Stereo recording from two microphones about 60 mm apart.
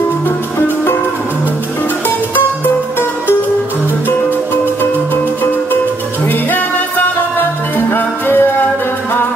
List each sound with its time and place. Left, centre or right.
5.1 s music: left